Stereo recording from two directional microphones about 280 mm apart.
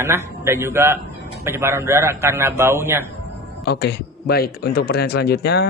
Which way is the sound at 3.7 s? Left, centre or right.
Left.